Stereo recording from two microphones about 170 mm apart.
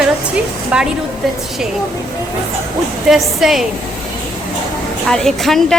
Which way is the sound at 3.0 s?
Centre (ahead or behind).